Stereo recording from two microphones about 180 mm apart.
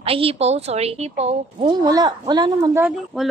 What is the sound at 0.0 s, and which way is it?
Speech, 30° right (ahead or behind).